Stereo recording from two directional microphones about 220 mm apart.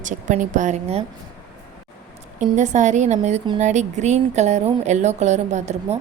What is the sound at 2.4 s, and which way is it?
A woman's voice, 35° right (ahead or behind).